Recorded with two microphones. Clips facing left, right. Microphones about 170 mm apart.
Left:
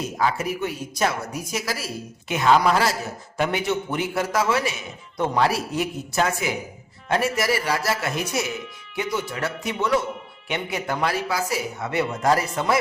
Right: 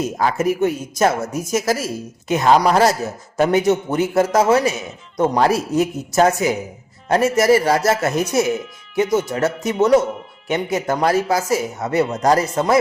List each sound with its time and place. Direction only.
0.0 s a woman's voice: 45° right (ahead or behind)